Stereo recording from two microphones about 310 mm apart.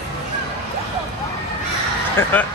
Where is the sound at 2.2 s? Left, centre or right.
Centre.